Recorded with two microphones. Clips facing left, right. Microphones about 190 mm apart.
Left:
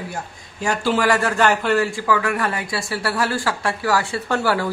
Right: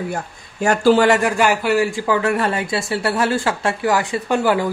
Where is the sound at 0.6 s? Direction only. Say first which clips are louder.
Right 7 dB; 45° right (ahead or behind).